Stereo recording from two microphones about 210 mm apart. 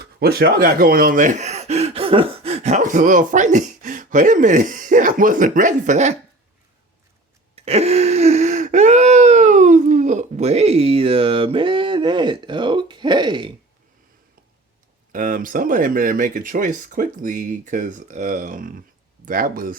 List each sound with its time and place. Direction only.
0.0 s speech: 50° right (ahead or behind)
7.5 s a sound: 30° right (ahead or behind)
15.1 s speech: 40° right (ahead or behind)